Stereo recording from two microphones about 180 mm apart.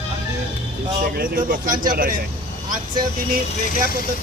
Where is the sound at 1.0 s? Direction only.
50° right (ahead or behind).